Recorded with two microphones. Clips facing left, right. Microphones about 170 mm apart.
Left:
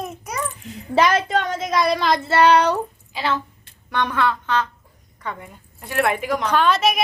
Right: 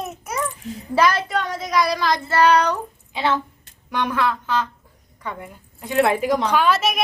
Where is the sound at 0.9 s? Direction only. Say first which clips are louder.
Left 1 dB; 25° left (ahead or behind).